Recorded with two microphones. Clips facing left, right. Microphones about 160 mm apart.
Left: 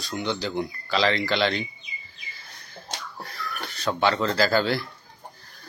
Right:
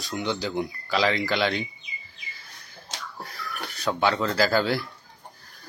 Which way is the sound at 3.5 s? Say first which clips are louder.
Even; 5° right (ahead or behind).